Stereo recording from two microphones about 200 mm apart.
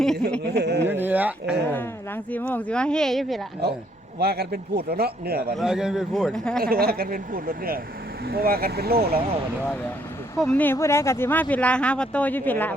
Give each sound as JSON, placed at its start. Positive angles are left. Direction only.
{"t": 0.0, "sound": "speech", "side_deg": 5}
{"t": 0.5, "sound": "speech", "side_deg": -55}
{"t": 0.9, "sound": "a sound", "side_deg": -10}
{"t": 2.3, "sound": "speech", "side_deg": 5}
{"t": 3.6, "sound": "a man's voice", "side_deg": -55}
{"t": 5.5, "sound": "speech", "side_deg": -5}
{"t": 6.6, "sound": "a man's voice", "side_deg": -50}
{"t": 10.3, "sound": "speech", "side_deg": 5}